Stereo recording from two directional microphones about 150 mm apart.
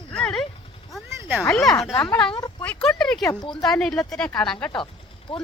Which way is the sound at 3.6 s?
5° left (ahead or behind).